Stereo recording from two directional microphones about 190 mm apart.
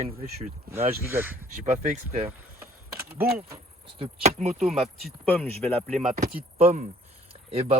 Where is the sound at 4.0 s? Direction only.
35° right (ahead or behind).